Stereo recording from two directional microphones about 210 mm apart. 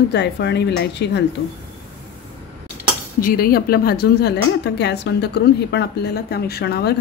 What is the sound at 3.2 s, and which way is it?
A woman's voice, 40° left (ahead or behind).